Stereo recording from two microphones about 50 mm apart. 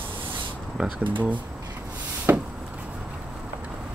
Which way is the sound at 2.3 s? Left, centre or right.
Right.